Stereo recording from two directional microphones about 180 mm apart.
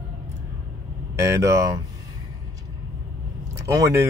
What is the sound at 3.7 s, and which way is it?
Speech, 15° right (ahead or behind).